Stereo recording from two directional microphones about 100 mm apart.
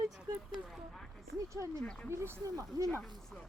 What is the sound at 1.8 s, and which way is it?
Speech, 10° left (ahead or behind).